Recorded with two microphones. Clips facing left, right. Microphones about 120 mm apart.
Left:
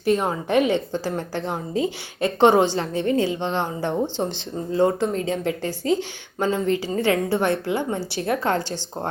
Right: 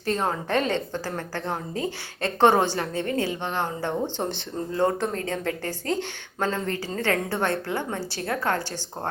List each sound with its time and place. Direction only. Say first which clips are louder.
0.0 s a woman's voice: left 5 dB; 15° left (ahead or behind)